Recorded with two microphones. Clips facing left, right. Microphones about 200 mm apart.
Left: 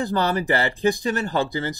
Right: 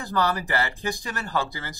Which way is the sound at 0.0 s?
25° left (ahead or behind).